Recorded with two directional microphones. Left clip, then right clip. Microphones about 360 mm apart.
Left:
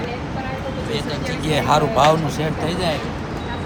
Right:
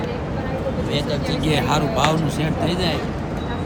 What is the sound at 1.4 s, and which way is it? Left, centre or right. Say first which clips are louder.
Speech: left 4 dB; centre.